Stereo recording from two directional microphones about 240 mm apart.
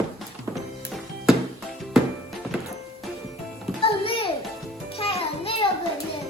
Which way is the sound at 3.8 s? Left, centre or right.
Left.